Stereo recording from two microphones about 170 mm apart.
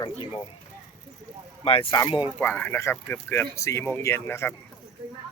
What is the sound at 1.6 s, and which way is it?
Speech, 35° left (ahead or behind).